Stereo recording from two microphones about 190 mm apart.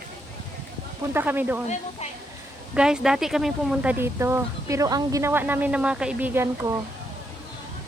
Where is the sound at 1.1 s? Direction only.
10° right (ahead or behind).